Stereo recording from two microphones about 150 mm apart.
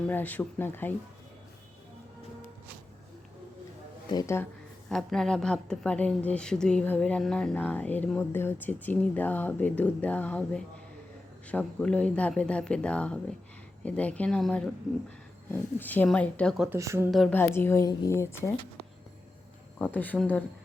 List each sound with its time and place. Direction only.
0.1 s a woman's voice: 10° left (ahead or behind)
4.1 s speech: 20° left (ahead or behind)
4.9 s a woman's voice: centre (ahead or behind)
16.6 s speech: 20° right (ahead or behind)
17.1 s speech: centre (ahead or behind)
17.3 s a woman's voice: 15° left (ahead or behind)
19.8 s a woman's voice: 10° left (ahead or behind)